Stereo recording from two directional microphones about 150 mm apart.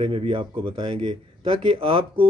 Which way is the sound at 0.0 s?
35° right (ahead or behind).